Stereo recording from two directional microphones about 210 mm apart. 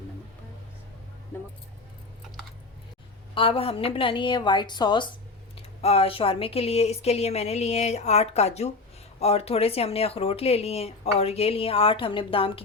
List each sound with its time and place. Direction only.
3.3 s speech: 25° left (ahead or behind)